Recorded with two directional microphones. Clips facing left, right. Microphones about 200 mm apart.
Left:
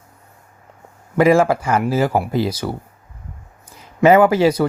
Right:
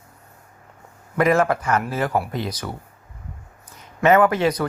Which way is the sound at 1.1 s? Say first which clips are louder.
Left 5 dB; 30° left (ahead or behind).